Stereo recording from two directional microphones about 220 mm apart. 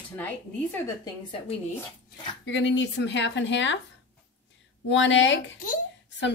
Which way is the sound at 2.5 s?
55° left (ahead or behind).